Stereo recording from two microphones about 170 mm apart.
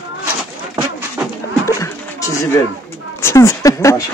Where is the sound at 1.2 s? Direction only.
10° right (ahead or behind).